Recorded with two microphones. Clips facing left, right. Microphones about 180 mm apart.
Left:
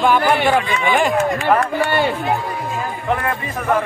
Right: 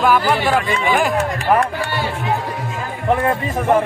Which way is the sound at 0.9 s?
Centre (ahead or behind).